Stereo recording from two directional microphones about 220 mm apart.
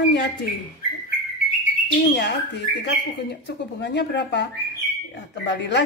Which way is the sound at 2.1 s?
50° left (ahead or behind).